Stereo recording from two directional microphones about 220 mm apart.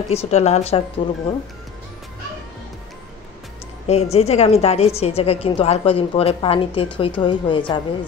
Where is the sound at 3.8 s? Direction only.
30° left (ahead or behind).